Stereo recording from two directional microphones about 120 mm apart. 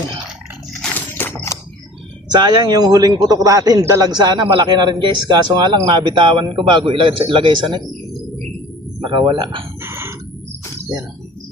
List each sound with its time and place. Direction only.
0.7 s a sound: 10° left (ahead or behind)
2.3 s a man's voice: 35° right (ahead or behind)
9.0 s speech: 45° right (ahead or behind)
9.8 s crowing: 20° right (ahead or behind)